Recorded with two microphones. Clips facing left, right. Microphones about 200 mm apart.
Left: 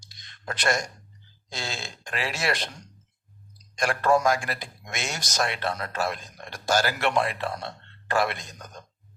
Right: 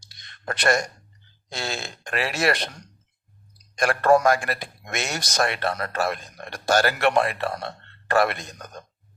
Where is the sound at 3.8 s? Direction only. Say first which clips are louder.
Right 4 dB; 60° right (ahead or behind).